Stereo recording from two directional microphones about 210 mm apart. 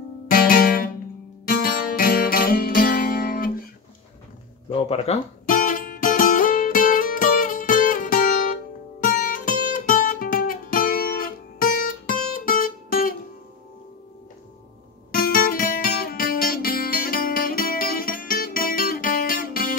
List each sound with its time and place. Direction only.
0.3 s music: 45° left (ahead or behind)
4.6 s music: 25° left (ahead or behind)
15.0 s guitar: 45° left (ahead or behind)